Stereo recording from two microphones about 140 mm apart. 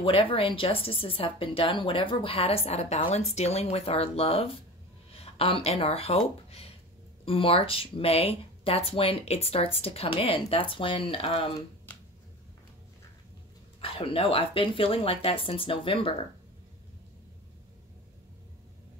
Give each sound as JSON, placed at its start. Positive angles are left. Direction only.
{"t": 0.0, "sound": "speech", "side_deg": 40}
{"t": 11.9, "sound": "finger snapping", "side_deg": 10}
{"t": 13.7, "sound": "speech", "side_deg": 40}